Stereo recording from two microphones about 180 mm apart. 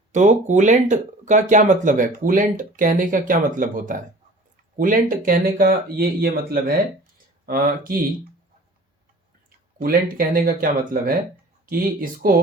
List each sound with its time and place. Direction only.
0.1 s speech: 40° right (ahead or behind)
9.7 s speech: 50° right (ahead or behind)